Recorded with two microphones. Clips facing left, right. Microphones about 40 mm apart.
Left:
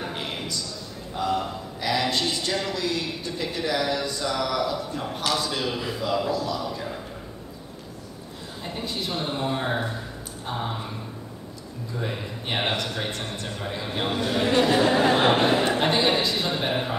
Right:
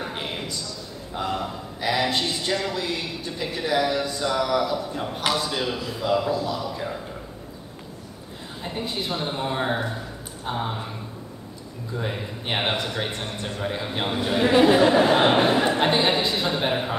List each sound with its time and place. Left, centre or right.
0.0 s a sound: centre
1.4 s a man's voice: centre
5.9 s a man's voice: centre
6.3 s speech: right
8.6 s a man's voice: centre
12.0 s a man's voice: centre
16.5 s a man's voice: centre